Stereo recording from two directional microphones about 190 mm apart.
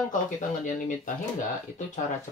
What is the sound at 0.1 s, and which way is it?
Speech, 45° left (ahead or behind).